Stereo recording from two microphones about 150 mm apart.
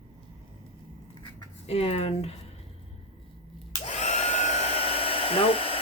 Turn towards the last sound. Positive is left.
turn(degrees=40)  # may be behind; listen again after turning